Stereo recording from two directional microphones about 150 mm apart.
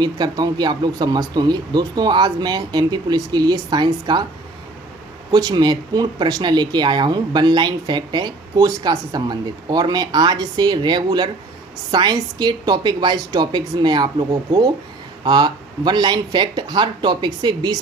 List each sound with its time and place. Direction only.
0.0 s speech: 30° right (ahead or behind)
5.3 s speech: 30° right (ahead or behind)